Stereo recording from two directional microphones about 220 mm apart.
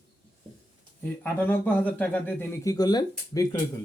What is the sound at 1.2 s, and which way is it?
Speech, 10° left (ahead or behind).